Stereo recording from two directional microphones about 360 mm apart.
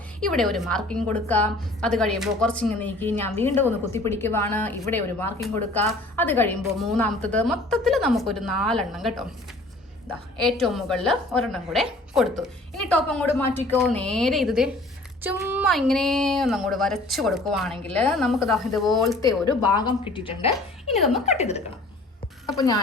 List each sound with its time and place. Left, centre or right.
0.2 s speech: centre
10.1 s a woman's voice: centre
10.6 s speech: centre
20.9 s speech: centre
21.2 s speech: centre